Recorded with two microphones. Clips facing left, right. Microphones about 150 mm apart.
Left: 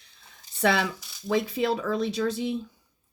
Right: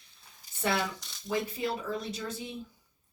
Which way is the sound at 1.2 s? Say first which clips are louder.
Left 7 dB; 85° left.